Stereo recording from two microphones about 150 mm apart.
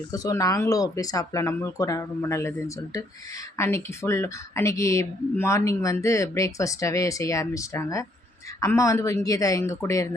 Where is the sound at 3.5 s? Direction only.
15° left (ahead or behind).